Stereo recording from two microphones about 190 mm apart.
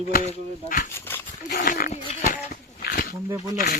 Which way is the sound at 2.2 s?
45° left (ahead or behind).